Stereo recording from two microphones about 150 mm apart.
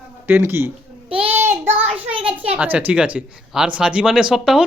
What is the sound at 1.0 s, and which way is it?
Child singing, 40° right (ahead or behind).